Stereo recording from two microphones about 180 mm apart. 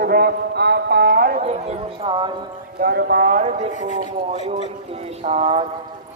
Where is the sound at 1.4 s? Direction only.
35° right (ahead or behind).